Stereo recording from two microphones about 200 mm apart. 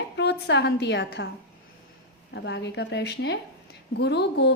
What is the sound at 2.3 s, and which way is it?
A woman's voice, 60° left (ahead or behind).